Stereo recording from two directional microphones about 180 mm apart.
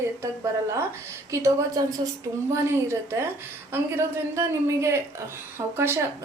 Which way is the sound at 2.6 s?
15° right (ahead or behind).